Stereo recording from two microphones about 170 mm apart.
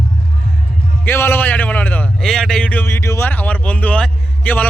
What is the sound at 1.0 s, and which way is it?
Speech, 10° left (ahead or behind).